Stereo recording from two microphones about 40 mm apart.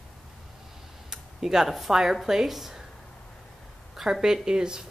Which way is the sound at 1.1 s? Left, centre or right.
Centre.